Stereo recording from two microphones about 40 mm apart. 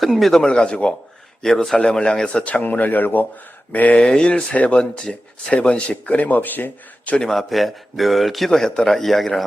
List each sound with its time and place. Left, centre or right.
0.2 s speech: centre
0.4 s speech: left
1.4 s speech: centre
1.7 s speech: left
2.4 s speech: left
3.7 s speech: left
3.9 s speech: left
6.1 s speech: left
7.3 s a man's voice: centre